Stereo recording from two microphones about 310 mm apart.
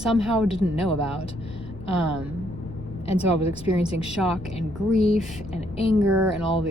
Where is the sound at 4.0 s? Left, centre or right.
Centre.